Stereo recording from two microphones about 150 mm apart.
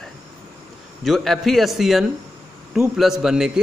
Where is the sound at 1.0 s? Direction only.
Centre (ahead or behind).